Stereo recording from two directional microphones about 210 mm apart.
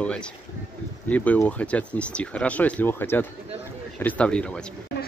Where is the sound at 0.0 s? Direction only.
5° left (ahead or behind).